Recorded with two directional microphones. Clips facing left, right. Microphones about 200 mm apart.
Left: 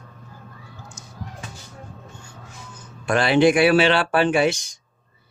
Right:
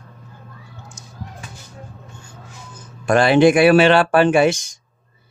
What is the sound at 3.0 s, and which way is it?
Speech, 45° right (ahead or behind).